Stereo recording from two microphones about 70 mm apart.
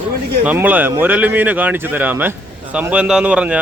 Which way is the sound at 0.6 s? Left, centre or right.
Right.